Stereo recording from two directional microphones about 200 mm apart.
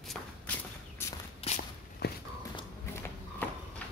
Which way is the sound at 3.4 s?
10° left (ahead or behind).